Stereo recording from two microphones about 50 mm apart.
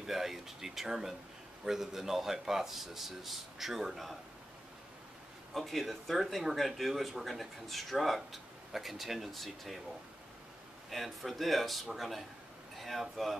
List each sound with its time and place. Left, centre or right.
0.0 s speech: centre
5.5 s speech: centre
10.9 s speech: centre